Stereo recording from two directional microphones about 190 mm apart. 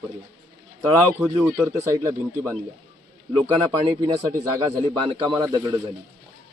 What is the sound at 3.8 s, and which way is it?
Speech, 30° right (ahead or behind).